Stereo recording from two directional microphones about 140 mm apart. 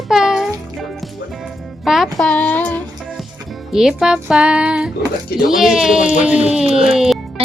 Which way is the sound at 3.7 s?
5° right (ahead or behind).